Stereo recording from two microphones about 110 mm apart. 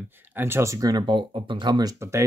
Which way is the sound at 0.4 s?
25° right (ahead or behind).